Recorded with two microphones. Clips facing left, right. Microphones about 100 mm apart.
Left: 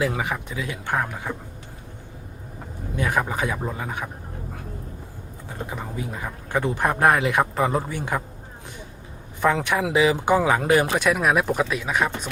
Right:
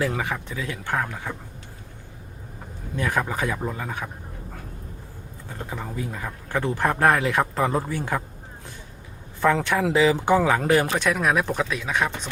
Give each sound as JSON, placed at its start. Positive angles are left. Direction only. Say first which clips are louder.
{"t": 0.0, "sound": "speech", "louder": "left 1 dB", "side_deg": 15}
{"t": 3.0, "sound": "speech", "louder": "left 1 dB", "side_deg": 15}
{"t": 5.5, "sound": "speech", "louder": "even", "side_deg": 20}
{"t": 9.4, "sound": "speech", "louder": "right 1 dB", "side_deg": 15}